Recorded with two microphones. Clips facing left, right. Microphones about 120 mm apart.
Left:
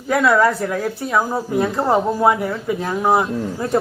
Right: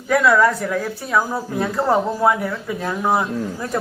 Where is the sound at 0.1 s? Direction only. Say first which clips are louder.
Even; 25° left (ahead or behind).